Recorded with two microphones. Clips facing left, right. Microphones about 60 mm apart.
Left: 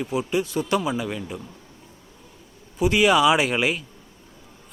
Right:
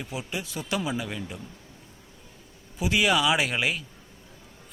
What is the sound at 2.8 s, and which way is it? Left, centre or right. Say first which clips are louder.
Speech: left 6 dB; centre.